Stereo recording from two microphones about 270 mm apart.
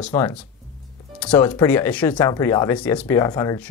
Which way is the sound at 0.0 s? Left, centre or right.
Centre.